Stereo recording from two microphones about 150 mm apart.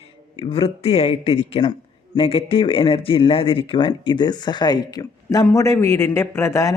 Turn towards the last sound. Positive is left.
turn(degrees=20)  # may be behind; listen again after turning